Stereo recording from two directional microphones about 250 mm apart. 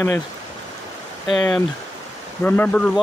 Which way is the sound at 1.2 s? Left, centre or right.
Centre.